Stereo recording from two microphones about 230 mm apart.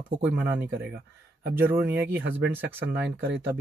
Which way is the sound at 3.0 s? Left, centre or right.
Right.